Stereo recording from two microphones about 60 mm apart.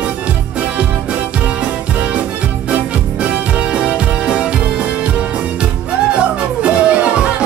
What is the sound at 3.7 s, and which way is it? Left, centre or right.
Music, centre.